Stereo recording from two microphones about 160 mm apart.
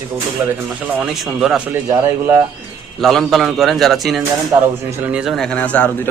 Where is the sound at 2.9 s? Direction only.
Centre (ahead or behind).